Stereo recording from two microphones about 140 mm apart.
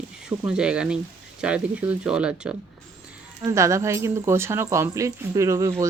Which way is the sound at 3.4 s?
20° right (ahead or behind).